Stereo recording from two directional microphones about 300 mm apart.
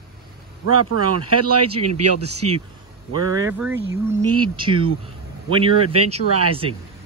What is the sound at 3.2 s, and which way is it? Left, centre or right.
Speech, centre.